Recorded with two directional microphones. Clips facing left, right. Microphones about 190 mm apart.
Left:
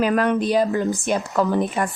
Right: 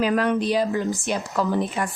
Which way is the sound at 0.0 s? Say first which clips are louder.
Left 2 dB; 50° left (ahead or behind).